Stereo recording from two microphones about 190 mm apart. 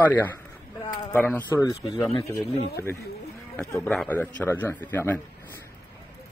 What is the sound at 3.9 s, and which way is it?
Speech, 5° left (ahead or behind).